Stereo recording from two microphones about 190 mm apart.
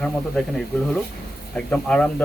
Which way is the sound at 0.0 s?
Centre (ahead or behind).